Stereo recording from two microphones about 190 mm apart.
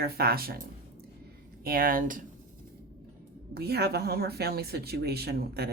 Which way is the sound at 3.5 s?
55° right (ahead or behind).